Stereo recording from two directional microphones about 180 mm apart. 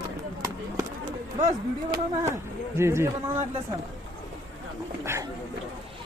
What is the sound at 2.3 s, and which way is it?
Speech, 15° right (ahead or behind).